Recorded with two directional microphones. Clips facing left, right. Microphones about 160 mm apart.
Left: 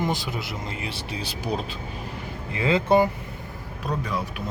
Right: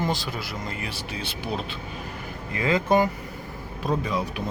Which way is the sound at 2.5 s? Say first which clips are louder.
Left 1 dB; 25° left (ahead or behind).